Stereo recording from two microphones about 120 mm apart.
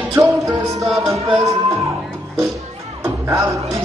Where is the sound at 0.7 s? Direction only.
Centre (ahead or behind).